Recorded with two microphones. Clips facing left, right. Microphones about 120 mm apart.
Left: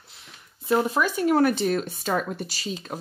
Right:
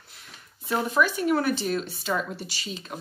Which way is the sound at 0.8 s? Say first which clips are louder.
Left 1 dB; 40° left (ahead or behind).